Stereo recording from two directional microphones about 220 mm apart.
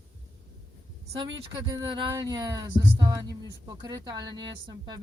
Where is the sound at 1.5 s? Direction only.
20° right (ahead or behind).